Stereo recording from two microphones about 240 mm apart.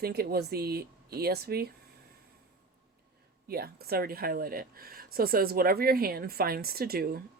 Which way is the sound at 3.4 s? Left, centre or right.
Right.